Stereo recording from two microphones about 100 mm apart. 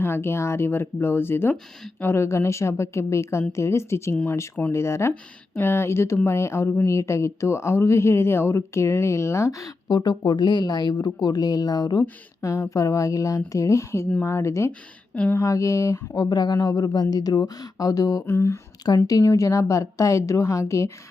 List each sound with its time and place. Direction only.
0.0 s speech: 25° left (ahead or behind)
4.1 s speech: 15° left (ahead or behind)
4.7 s speech: 30° left (ahead or behind)
9.9 s a woman's voice: 45° left (ahead or behind)
12.4 s speech: 30° left (ahead or behind)
15.1 s speech: 10° left (ahead or behind)
15.4 s speech: 35° left (ahead or behind)
18.3 s speech: 25° left (ahead or behind)